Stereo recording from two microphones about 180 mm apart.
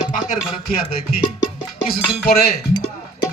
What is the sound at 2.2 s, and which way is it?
Music, 55° left (ahead or behind).